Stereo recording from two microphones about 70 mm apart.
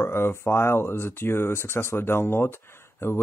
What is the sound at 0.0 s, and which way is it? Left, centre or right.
Speech, left.